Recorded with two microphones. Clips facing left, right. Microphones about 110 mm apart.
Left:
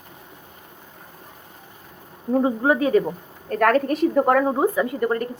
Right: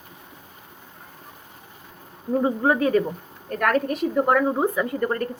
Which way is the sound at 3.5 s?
40° left (ahead or behind).